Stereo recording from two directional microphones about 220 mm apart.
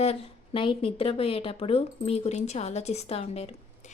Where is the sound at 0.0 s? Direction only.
25° left (ahead or behind).